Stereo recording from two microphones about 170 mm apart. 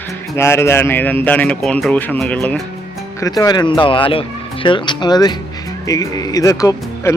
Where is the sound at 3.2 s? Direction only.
20° left (ahead or behind).